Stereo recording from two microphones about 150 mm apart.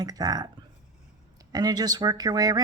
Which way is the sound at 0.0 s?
25° right (ahead or behind).